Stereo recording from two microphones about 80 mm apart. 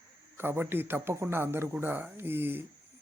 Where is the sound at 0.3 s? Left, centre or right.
Right.